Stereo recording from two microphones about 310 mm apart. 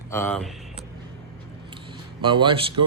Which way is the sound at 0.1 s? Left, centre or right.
Centre.